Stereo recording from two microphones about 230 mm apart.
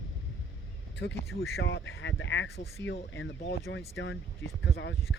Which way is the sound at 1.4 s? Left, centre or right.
Left.